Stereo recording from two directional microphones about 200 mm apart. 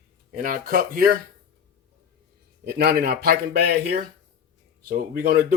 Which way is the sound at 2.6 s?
50° right (ahead or behind).